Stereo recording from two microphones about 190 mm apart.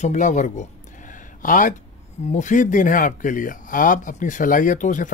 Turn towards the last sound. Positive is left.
turn(degrees=45)  # may be behind; listen again after turning